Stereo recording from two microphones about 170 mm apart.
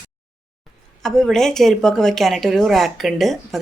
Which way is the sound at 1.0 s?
5° left (ahead or behind).